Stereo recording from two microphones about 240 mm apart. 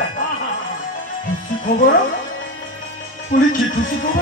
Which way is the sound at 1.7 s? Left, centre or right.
Left.